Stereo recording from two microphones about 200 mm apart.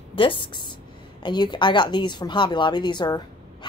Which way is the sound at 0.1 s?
25° left (ahead or behind).